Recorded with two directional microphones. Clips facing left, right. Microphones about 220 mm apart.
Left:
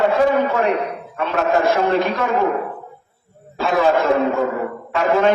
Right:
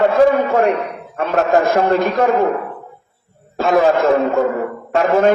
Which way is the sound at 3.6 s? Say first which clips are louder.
Right 3 dB; 45° right (ahead or behind).